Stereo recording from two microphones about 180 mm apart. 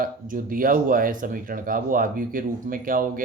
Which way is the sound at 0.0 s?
50° right (ahead or behind).